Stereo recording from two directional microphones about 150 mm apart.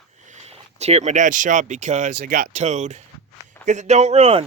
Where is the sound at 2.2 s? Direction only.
65° right (ahead or behind); by 4.4 s 40° right (ahead or behind).